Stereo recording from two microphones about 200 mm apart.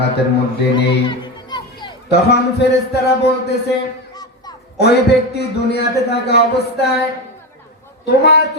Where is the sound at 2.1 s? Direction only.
55° left (ahead or behind).